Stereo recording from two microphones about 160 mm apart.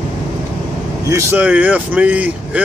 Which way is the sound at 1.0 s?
15° right (ahead or behind).